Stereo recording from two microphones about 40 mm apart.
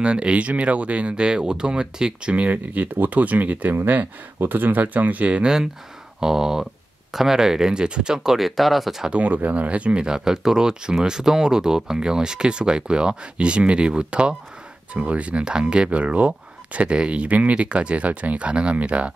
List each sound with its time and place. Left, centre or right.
0.0 s speech: right
2.3 s speech: right
5.4 s speech: centre
8.4 s speech: centre
9.1 s speech: right
10.0 s speech: centre; by 19.1 s right